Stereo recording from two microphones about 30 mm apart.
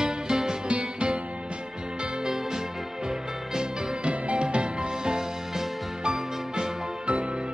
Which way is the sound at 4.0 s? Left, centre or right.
Right.